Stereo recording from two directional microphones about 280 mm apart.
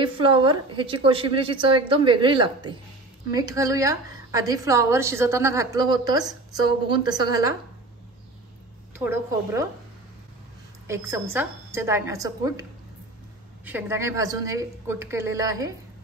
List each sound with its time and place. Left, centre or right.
0.0 s a woman's voice: centre
8.9 s a woman's voice: centre
10.9 s a woman's voice: centre
13.7 s a woman's voice: centre